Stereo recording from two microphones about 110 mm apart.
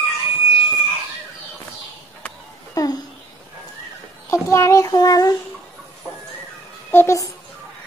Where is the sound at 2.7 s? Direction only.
35° left (ahead or behind).